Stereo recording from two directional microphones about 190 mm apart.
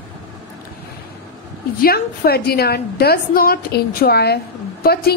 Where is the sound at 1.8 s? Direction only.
55° left (ahead or behind).